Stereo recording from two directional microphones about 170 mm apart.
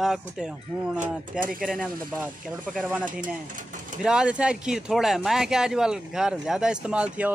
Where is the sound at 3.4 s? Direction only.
50° right (ahead or behind).